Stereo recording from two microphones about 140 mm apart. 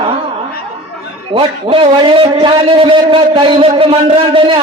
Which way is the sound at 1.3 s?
40° right (ahead or behind).